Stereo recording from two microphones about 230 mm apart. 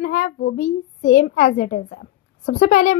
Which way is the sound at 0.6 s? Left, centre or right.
Left.